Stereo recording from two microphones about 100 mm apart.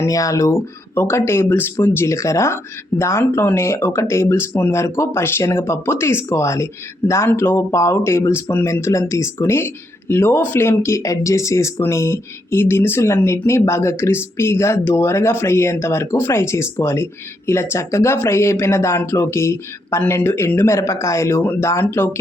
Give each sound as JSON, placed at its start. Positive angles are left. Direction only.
{"t": 0.0, "sound": "speech", "side_deg": 35}